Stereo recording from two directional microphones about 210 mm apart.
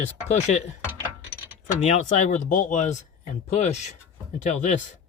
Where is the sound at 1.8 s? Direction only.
35° left (ahead or behind).